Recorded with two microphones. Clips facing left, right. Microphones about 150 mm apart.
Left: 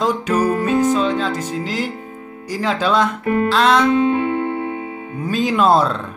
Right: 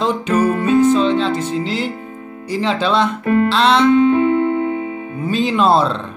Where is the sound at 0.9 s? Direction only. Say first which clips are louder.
Right 3 dB; 10° left (ahead or behind).